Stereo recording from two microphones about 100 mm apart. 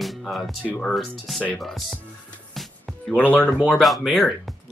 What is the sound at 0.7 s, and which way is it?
Speech, 15° left (ahead or behind).